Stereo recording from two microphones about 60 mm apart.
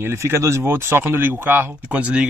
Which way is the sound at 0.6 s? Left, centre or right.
Right.